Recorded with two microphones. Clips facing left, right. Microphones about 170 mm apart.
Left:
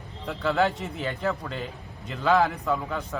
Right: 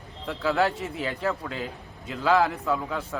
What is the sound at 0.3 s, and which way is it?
A man's voice, centre (ahead or behind).